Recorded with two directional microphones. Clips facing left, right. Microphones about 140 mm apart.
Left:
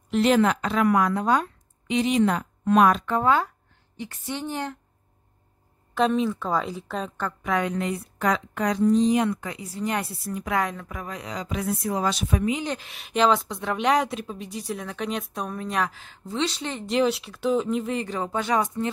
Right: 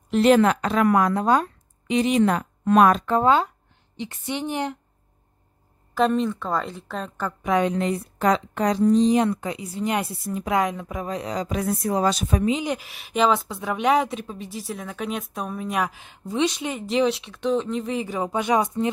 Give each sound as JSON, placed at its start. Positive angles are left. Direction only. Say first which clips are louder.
{"t": 0.1, "sound": "speech", "louder": "right 3 dB", "side_deg": -45}
{"t": 3.3, "sound": "speech", "louder": "right 1 dB", "side_deg": -20}
{"t": 5.9, "sound": "speech", "louder": "right 1 dB", "side_deg": 0}
{"t": 7.4, "sound": "a woman's voice", "louder": "right 4 dB", "side_deg": -20}
{"t": 12.5, "sound": "speech", "louder": "right 3 dB", "side_deg": -10}
{"t": 16.8, "sound": "speech", "louder": "right 1 dB", "side_deg": 0}